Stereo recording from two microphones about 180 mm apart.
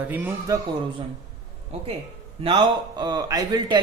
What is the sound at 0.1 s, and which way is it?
Speech, 10° right (ahead or behind).